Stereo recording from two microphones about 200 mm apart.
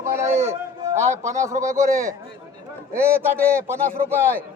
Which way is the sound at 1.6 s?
15° right (ahead or behind).